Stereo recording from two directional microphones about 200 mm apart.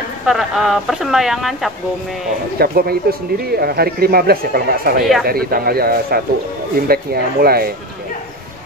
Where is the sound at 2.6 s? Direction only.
50° right (ahead or behind).